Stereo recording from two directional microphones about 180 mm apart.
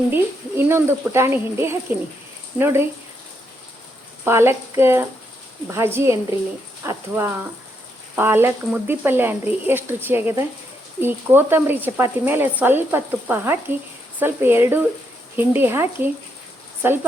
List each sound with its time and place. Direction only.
0.1 s speech: 15° right (ahead or behind)
4.2 s speech: 15° right (ahead or behind)